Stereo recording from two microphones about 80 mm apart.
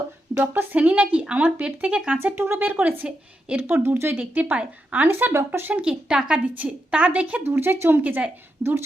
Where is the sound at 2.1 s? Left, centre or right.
Right.